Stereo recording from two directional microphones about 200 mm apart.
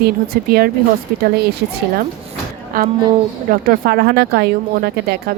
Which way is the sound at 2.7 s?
45° right (ahead or behind).